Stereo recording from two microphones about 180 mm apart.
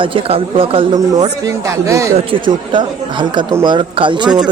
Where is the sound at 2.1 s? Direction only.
30° right (ahead or behind).